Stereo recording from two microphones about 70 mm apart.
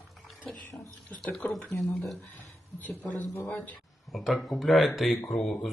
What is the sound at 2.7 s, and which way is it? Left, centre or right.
Speech, left.